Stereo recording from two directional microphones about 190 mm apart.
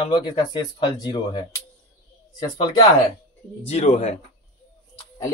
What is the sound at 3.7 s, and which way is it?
Speech, 35° left (ahead or behind).